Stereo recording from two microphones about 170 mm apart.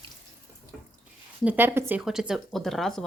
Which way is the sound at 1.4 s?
10° right (ahead or behind).